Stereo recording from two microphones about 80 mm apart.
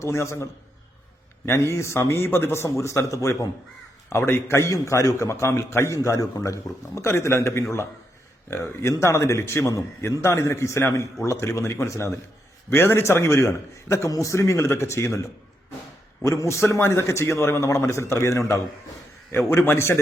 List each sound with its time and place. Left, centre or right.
0.0 s a man's voice: left
1.5 s a man's voice: left